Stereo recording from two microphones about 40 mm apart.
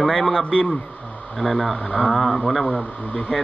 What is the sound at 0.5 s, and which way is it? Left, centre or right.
Speech, left.